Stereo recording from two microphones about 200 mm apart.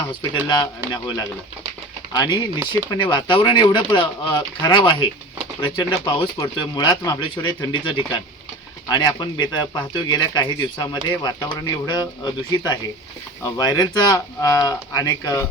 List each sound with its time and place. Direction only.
0.1 s speech: 20° left (ahead or behind)
2.1 s speech: 20° left (ahead or behind)